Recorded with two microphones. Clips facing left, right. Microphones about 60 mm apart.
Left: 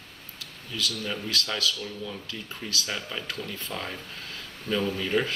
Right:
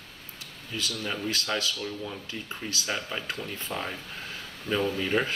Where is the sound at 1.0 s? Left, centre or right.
Right.